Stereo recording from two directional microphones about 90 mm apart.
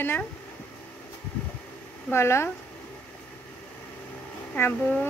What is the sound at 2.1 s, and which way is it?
Speech, 30° left (ahead or behind).